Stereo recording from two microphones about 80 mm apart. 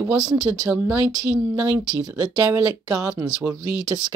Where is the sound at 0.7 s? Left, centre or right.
Centre.